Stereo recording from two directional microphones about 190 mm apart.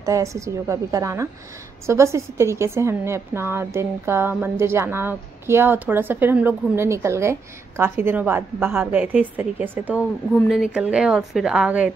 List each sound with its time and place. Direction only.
0.0 s a woman's voice: 15° right (ahead or behind)